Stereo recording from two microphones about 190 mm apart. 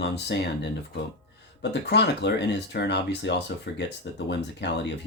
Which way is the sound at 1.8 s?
65° left (ahead or behind).